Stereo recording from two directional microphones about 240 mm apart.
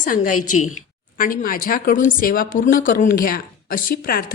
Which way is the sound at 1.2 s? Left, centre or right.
Left.